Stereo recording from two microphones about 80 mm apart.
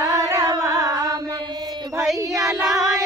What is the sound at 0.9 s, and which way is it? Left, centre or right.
Mantra, right.